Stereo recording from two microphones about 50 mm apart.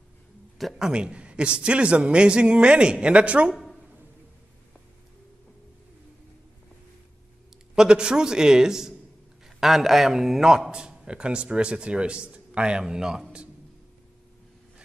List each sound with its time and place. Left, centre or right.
0.7 s a man's voice: centre
7.7 s a man's voice: centre